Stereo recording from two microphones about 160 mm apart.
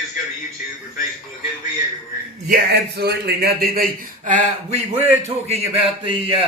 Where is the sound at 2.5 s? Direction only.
85° right.